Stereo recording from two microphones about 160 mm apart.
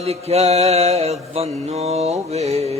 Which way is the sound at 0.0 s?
40° right (ahead or behind).